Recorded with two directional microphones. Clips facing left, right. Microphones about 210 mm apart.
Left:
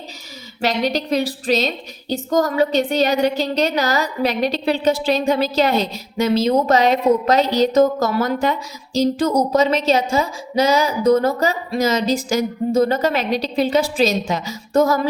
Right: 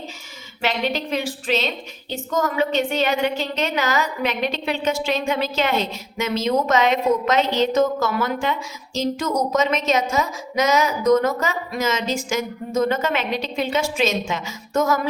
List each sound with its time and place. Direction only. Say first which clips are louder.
0.6 s a woman's voice: left 4 dB; 40° left (ahead or behind)